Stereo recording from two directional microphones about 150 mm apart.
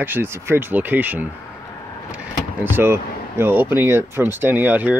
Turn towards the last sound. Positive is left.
turn(degrees=-10)  # may be behind; listen again after turning